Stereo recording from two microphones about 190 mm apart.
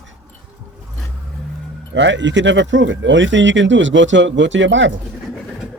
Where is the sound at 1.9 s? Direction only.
70° right (ahead or behind).